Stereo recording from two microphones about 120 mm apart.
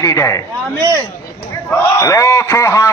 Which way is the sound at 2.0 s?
25° left (ahead or behind).